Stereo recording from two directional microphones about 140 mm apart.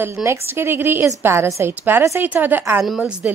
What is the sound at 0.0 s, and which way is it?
A woman's voice, 20° right (ahead or behind).